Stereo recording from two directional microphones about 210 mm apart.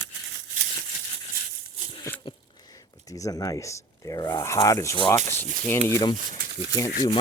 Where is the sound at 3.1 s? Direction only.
15° left (ahead or behind).